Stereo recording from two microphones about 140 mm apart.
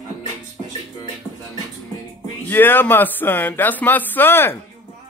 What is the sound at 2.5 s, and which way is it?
Speech, 15° left (ahead or behind).